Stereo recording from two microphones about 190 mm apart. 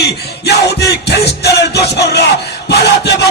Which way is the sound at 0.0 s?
60° left (ahead or behind).